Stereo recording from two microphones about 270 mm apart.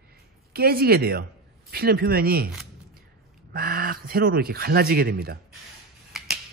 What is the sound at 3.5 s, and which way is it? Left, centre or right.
Speech, right.